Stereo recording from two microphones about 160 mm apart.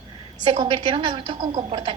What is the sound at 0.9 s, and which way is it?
A woman's voice, 30° right (ahead or behind).